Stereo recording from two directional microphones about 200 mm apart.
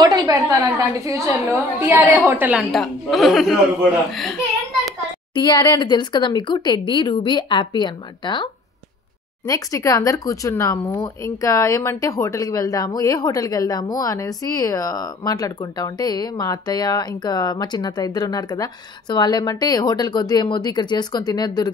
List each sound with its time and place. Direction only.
0.0 s a woman's voice: 20° right (ahead or behind); by 4.4 s centre (ahead or behind)
5.3 s speech: 20° left (ahead or behind)
9.5 s speech: 15° left (ahead or behind)